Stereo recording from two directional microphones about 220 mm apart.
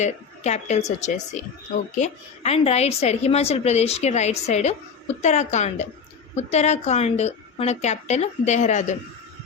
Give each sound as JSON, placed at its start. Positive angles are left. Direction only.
{"t": 0.0, "sound": "a woman's voice", "side_deg": 30}